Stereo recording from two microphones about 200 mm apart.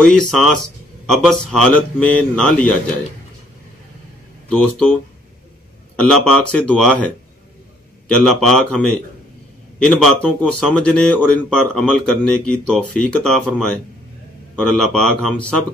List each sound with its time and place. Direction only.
0.0 s speech: centre (ahead or behind)
4.5 s speech: 5° left (ahead or behind)
5.9 s speech: 5° left (ahead or behind)